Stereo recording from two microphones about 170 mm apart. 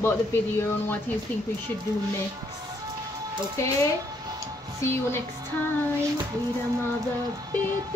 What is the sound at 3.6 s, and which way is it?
Speech, 15° left (ahead or behind).